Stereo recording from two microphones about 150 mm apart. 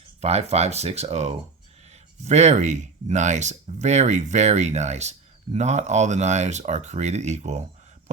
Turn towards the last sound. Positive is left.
turn(degrees=-50)  # may be behind; listen again after turning